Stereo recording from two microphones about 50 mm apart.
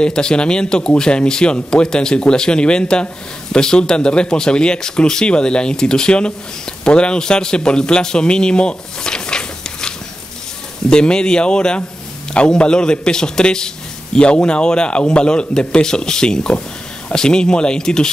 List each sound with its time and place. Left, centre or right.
0.0 s a man's voice: centre